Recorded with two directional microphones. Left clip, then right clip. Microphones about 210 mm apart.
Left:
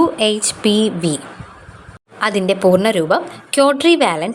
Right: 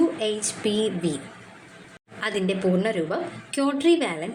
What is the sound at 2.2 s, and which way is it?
A woman's voice, 25° left (ahead or behind).